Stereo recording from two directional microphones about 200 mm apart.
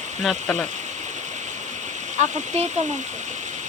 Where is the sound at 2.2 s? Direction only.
35° right (ahead or behind).